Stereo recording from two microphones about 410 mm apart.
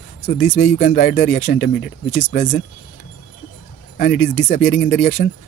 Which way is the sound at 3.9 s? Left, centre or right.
Left.